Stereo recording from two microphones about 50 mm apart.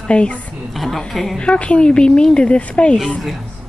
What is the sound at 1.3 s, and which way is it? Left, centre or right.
A woman's voice, left.